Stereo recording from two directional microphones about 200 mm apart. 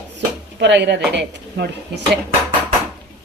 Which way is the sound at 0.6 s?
60° right (ahead or behind).